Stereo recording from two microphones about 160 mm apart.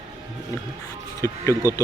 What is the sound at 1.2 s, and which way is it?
Speech, 20° left (ahead or behind).